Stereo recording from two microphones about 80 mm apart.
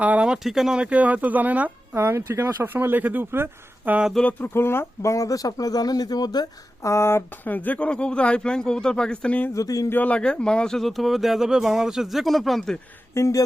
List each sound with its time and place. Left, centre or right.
0.0 s speech: centre
0.4 s speech: centre
2.0 s speech: right
4.1 s speech: centre
4.4 s speech: left
5.1 s speech: left
6.8 s speech: left
7.4 s speech: left
9.6 s speech: left
9.9 s speech: centre
13.1 s speech: left